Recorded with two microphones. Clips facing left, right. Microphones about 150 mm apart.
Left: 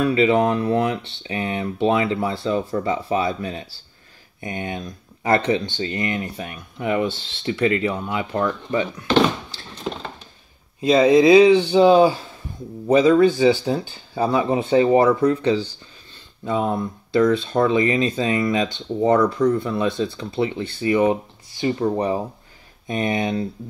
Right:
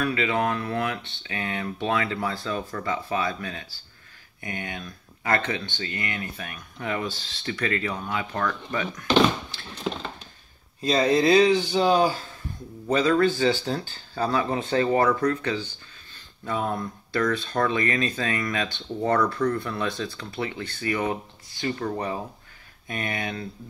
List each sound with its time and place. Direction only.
0.0 s speech: 25° left (ahead or behind)
10.8 s speech: 15° left (ahead or behind)
15.2 s speech: 30° left (ahead or behind)